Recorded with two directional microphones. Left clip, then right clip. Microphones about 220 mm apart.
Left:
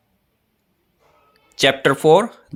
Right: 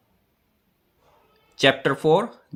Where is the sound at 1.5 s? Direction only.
45° left (ahead or behind).